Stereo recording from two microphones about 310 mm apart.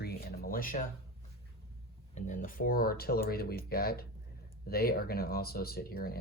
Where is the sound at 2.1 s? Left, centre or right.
Left.